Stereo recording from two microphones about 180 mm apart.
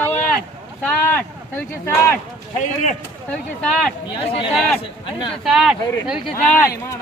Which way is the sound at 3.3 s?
5° left (ahead or behind).